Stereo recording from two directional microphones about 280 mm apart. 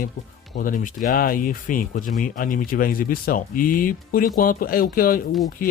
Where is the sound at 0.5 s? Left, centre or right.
Left.